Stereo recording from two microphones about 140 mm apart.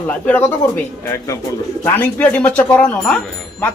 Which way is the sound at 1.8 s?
10° left (ahead or behind).